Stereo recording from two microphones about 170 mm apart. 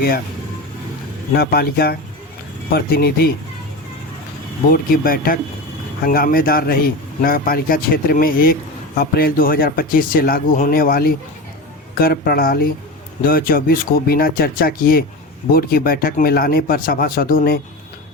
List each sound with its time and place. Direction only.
1.3 s a man's voice: 65° left (ahead or behind)
4.7 s a man's voice: 60° left (ahead or behind)